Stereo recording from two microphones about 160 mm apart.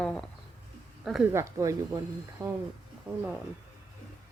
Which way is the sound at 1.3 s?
15° right (ahead or behind).